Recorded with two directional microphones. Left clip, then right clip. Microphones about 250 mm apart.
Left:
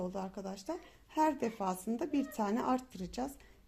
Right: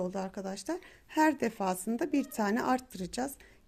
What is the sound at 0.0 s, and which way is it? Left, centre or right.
Speech, right.